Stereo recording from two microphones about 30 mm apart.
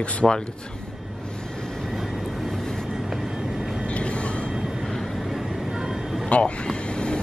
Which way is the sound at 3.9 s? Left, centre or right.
Left.